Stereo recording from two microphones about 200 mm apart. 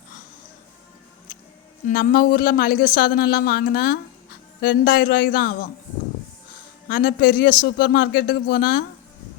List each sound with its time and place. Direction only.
1.9 s speech: 45° left (ahead or behind)
6.8 s speech: 50° left (ahead or behind)